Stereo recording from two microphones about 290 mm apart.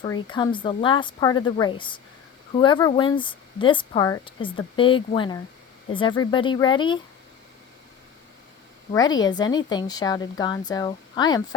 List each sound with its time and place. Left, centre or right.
0.0 s speech: centre
8.9 s speech: centre